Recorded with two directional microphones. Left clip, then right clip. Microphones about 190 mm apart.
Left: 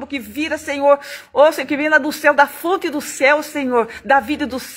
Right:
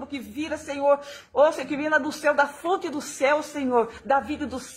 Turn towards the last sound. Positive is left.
turn(degrees=20)  # may be behind; listen again after turning